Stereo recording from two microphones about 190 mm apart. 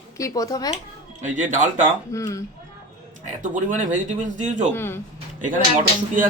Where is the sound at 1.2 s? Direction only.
40° right (ahead or behind).